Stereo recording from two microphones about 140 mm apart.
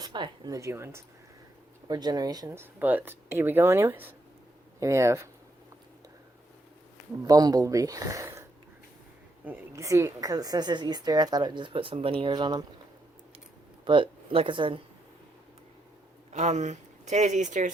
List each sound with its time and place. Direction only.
0.0 s a woman's voice: 30° right (ahead or behind)
1.9 s a woman's voice: 30° right (ahead or behind)
7.2 s a woman's voice: 25° right (ahead or behind)
13.8 s speech: 35° right (ahead or behind)
16.3 s speech: 55° right (ahead or behind)